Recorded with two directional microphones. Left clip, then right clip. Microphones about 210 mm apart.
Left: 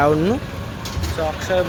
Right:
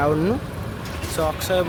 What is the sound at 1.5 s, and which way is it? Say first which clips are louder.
Speech: left 3 dB; 15° right (ahead or behind).